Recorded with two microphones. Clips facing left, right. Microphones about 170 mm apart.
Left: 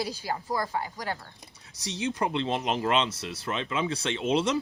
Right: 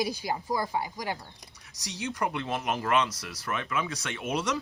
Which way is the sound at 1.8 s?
25° left (ahead or behind).